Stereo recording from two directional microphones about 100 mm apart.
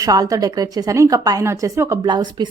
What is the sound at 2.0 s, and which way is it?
Speech, 50° right (ahead or behind).